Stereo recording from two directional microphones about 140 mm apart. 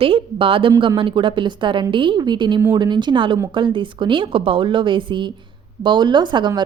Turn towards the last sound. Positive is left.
turn(degrees=-35)  # may be behind; listen again after turning